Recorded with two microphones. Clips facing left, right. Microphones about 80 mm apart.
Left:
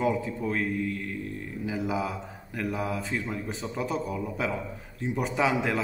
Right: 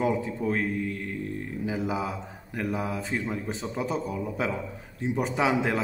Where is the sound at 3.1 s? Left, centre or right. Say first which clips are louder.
Right 2 dB; right.